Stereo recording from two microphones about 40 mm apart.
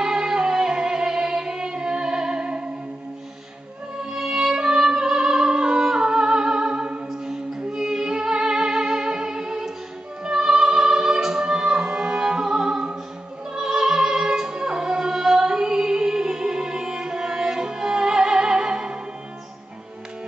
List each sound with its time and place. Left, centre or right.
0.0 s music: centre
4.0 s music: centre
7.1 s music: centre
13.6 s opera: centre
14.4 s music: right